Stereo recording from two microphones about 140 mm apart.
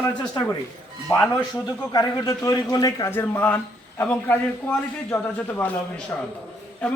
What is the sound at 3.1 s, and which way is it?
A man's voice, 15° left (ahead or behind).